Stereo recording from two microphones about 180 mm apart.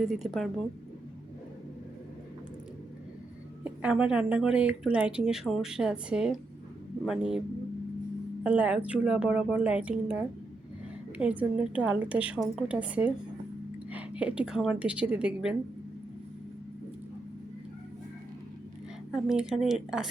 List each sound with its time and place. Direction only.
0.0 s speech: centre (ahead or behind)
3.6 s speech: 5° right (ahead or behind)
8.4 s a woman's voice: 10° right (ahead or behind)
19.1 s speech: 5° right (ahead or behind)